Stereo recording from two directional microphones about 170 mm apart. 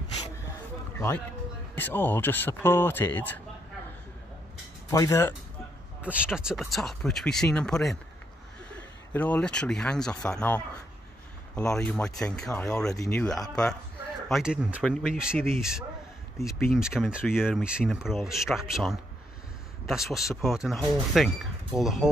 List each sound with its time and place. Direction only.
0.9 s speech: 15° left (ahead or behind)
4.8 s speech: 20° left (ahead or behind)
6.0 s speech: 5° right (ahead or behind)
9.1 s speech: 10° left (ahead or behind)
12.4 s speech: 20° left (ahead or behind); by 15.3 s 5° right (ahead or behind)
16.3 s speech: 15° left (ahead or behind)
16.7 s speech: centre (ahead or behind)